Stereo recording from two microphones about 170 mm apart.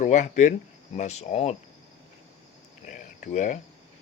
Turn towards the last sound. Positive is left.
turn(degrees=45)  # may be behind; listen again after turning